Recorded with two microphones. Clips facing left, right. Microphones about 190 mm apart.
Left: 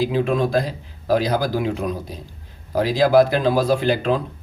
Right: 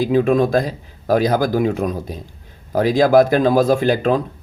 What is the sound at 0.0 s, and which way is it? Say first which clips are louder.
Speech: right 5 dB; 50° right (ahead or behind).